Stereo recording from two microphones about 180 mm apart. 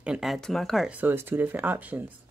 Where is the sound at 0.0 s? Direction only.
5° right (ahead or behind).